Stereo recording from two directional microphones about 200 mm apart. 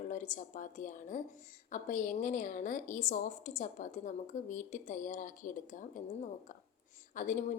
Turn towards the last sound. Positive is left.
turn(degrees=40)  # may be behind; listen again after turning